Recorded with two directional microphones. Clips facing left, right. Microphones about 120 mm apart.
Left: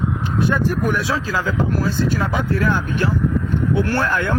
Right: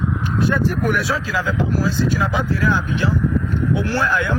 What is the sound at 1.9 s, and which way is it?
A man's voice, 55° left (ahead or behind).